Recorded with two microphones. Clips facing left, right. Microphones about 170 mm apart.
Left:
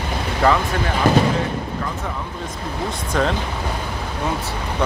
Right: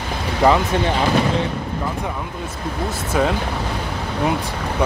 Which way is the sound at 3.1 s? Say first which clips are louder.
Right 1 dB; 10° right (ahead or behind).